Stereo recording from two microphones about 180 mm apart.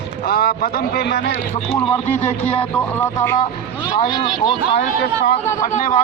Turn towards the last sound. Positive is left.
turn(degrees=45)  # may be behind; listen again after turning